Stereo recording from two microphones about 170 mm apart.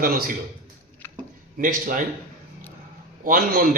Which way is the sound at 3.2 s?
55° right (ahead or behind).